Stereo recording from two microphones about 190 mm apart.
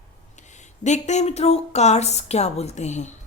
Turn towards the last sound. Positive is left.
turn(degrees=35)  # may be behind; listen again after turning